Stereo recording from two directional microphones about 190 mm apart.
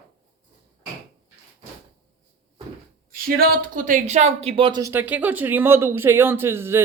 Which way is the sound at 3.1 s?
50° right (ahead or behind).